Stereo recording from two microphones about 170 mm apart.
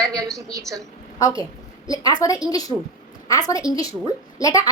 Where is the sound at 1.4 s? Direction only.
20° left (ahead or behind).